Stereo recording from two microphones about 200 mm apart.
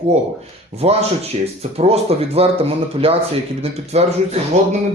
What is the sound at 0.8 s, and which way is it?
A man's voice, 30° right (ahead or behind).